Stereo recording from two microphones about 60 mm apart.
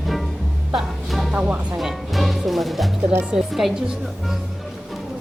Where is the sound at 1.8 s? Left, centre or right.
Centre.